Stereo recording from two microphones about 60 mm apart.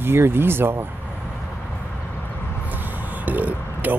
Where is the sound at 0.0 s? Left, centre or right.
Right.